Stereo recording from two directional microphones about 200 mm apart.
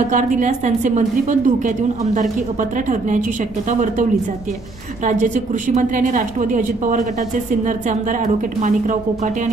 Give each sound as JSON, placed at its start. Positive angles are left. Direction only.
{"t": 0.1, "sound": "a woman's voice", "side_deg": -40}
{"t": 5.0, "sound": "a woman's voice", "side_deg": -40}